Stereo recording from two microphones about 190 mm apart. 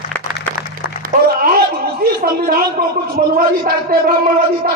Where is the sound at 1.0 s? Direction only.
50° right (ahead or behind).